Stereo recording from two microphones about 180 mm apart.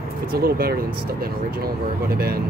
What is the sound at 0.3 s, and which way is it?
Speech, 55° right (ahead or behind).